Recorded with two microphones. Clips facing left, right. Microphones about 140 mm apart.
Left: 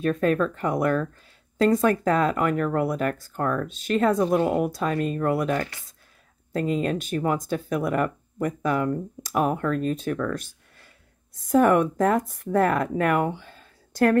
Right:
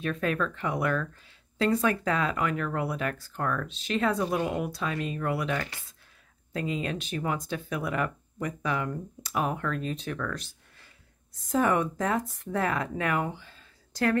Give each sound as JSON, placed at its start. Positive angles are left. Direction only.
{"t": 0.0, "sound": "speech", "side_deg": 45}